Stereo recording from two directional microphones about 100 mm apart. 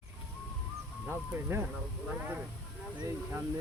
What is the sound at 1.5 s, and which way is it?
Speech, 25° right (ahead or behind).